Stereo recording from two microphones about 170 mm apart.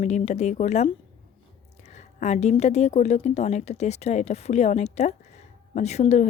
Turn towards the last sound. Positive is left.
turn(degrees=40)  # may be behind; listen again after turning